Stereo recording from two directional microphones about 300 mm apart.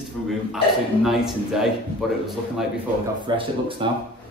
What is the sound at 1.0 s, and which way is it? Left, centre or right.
A man's voice, centre.